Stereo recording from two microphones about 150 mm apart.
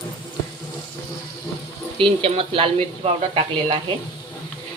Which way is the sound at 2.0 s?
40° right (ahead or behind).